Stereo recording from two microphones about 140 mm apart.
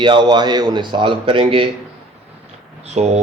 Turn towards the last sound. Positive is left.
turn(degrees=-55)  # may be behind; listen again after turning